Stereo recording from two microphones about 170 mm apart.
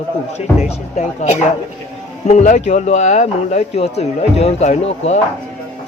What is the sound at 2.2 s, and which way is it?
Speech, 45° left (ahead or behind).